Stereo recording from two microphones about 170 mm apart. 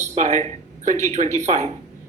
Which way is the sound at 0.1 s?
40° right (ahead or behind).